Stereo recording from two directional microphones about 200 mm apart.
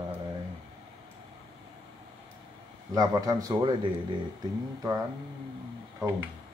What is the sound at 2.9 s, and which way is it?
A man's voice, 15° right (ahead or behind).